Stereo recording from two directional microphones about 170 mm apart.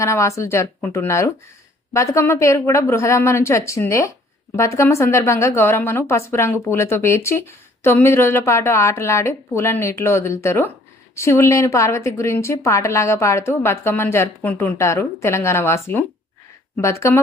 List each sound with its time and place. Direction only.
0.0 s a woman's voice: 15° left (ahead or behind)